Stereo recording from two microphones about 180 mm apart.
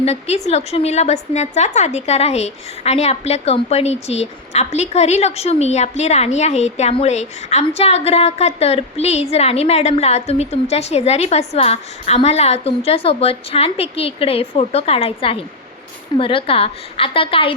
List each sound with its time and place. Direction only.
0.0 s a woman's voice: 35° left (ahead or behind)